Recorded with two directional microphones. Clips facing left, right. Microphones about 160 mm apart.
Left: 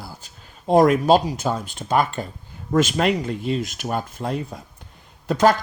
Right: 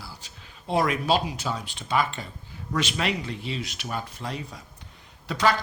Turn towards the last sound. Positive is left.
turn(degrees=45)  # may be behind; listen again after turning